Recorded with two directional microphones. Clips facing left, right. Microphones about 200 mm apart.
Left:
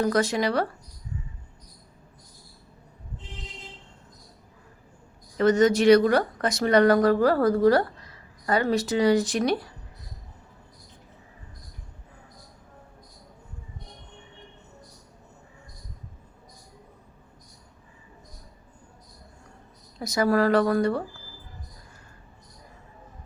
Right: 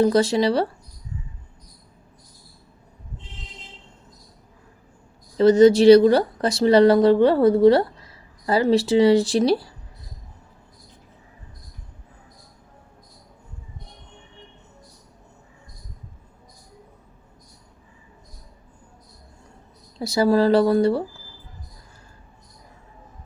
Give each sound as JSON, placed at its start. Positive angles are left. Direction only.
{"t": 0.0, "sound": "speech", "side_deg": -30}
{"t": 5.4, "sound": "speech", "side_deg": -30}
{"t": 20.0, "sound": "speech", "side_deg": -30}